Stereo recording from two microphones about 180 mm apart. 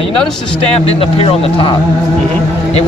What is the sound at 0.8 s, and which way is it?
Speech, 30° left (ahead or behind).